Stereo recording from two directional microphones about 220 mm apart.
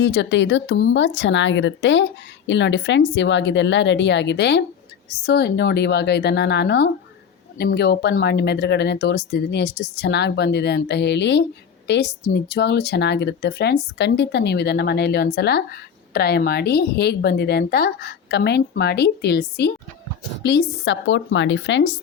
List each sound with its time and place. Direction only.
0.0 s speech: 55° left (ahead or behind)